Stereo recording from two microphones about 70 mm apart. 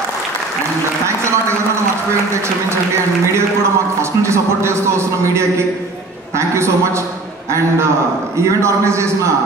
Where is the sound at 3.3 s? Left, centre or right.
Right.